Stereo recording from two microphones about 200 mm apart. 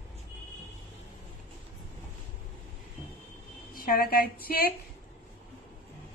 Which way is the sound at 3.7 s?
45° left (ahead or behind).